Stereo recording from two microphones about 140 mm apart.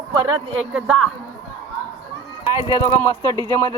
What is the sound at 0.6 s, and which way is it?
Speech, 5° right (ahead or behind).